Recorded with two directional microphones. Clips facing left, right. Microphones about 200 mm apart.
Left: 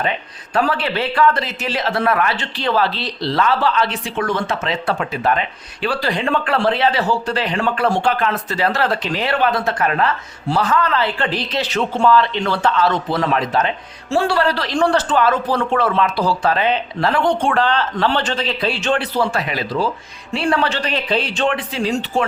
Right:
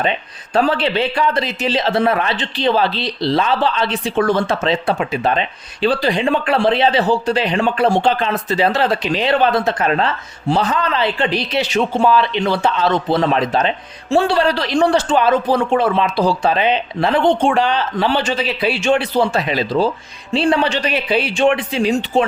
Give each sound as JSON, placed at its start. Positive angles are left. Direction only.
{"t": 0.5, "sound": "speech", "side_deg": -25}
{"t": 4.9, "sound": "speech", "side_deg": -15}
{"t": 19.5, "sound": "speech", "side_deg": -25}